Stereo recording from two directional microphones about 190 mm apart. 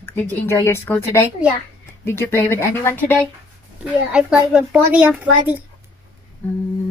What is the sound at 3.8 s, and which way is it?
A child's voice, 5° right (ahead or behind).